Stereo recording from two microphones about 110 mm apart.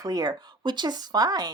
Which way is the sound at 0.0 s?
35° right (ahead or behind).